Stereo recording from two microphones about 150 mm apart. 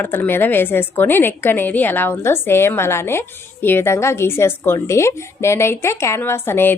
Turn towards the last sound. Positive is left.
turn(degrees=15)  # may be behind; listen again after turning